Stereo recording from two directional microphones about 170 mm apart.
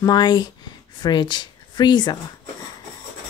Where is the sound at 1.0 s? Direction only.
25° left (ahead or behind).